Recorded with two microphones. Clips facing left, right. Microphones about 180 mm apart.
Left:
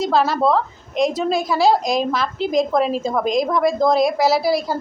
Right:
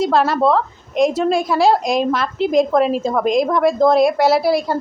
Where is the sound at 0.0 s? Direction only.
Centre (ahead or behind).